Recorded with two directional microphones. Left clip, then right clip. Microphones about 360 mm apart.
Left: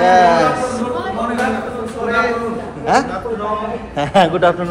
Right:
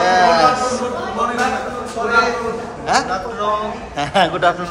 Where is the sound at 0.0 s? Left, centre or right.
Centre.